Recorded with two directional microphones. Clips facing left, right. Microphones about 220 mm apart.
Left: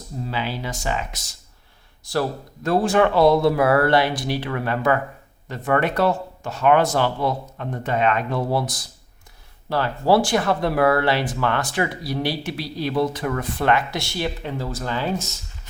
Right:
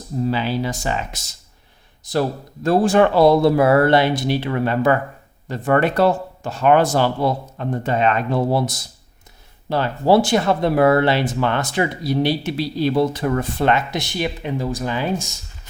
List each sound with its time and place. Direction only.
0.3 s speech: 35° right (ahead or behind)
2.0 s speech: 20° right (ahead or behind)
2.6 s speech: 35° right (ahead or behind); by 15.4 s 15° right (ahead or behind)